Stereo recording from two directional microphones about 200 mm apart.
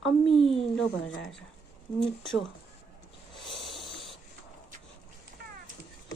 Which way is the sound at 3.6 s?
Centre (ahead or behind).